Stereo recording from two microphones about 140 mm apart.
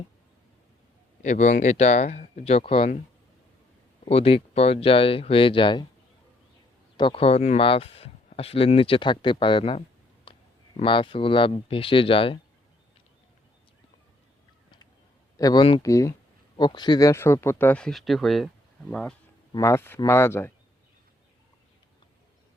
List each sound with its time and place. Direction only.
1.2 s speech: 55° left (ahead or behind)
4.0 s speech: 45° left (ahead or behind)
6.9 s speech: 40° left (ahead or behind)
10.3 s a sound: 35° left (ahead or behind)
10.8 s speech: 35° left (ahead or behind)
15.4 s speech: 25° left (ahead or behind); by 19.1 s 5° left (ahead or behind)
19.5 s speech: 20° left (ahead or behind)